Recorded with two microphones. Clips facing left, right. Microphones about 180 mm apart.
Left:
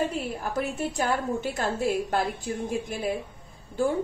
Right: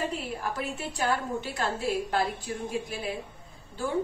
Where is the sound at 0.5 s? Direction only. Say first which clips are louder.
Left 6 dB; 45° left (ahead or behind).